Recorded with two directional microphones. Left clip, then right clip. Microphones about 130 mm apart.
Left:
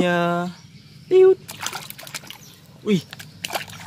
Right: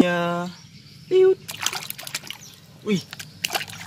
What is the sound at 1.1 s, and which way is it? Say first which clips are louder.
Splash: left 3 dB; 20° left (ahead or behind).